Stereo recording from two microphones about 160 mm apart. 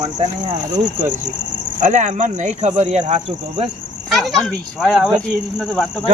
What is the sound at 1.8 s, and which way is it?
Speech, 50° right (ahead or behind).